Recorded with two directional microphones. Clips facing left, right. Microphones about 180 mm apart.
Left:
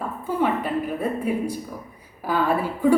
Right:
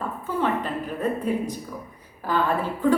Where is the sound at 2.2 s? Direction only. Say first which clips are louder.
Left 2 dB; 10° left (ahead or behind).